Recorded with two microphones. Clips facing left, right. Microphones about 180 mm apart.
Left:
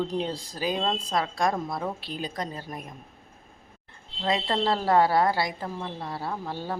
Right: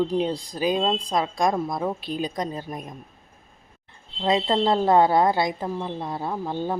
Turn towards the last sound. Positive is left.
turn(degrees=-20)  # may be behind; listen again after turning